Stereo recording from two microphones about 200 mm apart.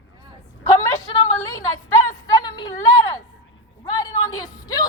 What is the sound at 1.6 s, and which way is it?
A woman's voice, 20° left (ahead or behind).